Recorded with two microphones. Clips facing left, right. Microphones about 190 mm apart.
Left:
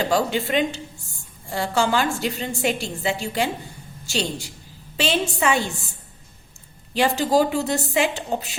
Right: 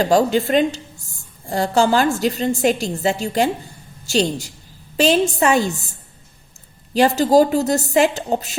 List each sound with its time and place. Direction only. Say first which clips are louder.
0.0 s a woman's voice: right 6 dB; 40° right (ahead or behind)
6.9 s a woman's voice: right 5 dB; 40° right (ahead or behind)